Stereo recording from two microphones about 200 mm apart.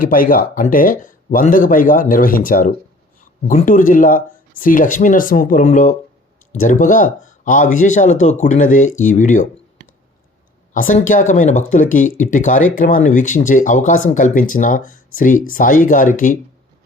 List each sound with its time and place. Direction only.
0.0 s a man's voice: 45° left (ahead or behind)
10.8 s speech: 40° left (ahead or behind)